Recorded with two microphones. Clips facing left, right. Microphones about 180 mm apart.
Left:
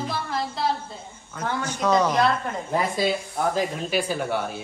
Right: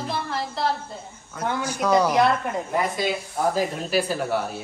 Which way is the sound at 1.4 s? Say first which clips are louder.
Right 1 dB; 10° right (ahead or behind).